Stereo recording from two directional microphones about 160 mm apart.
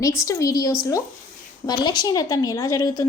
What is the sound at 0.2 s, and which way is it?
A woman's voice, 20° left (ahead or behind).